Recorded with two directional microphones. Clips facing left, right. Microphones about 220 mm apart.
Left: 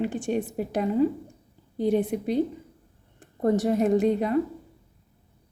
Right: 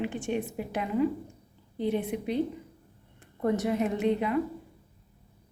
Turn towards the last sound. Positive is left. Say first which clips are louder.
# left 5 dB
turn(degrees=40)  # may be behind; listen again after turning